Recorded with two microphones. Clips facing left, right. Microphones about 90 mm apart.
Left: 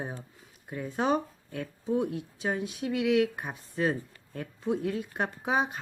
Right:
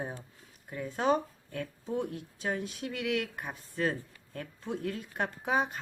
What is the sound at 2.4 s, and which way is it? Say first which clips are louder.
Speech: left 2 dB; 10° left (ahead or behind).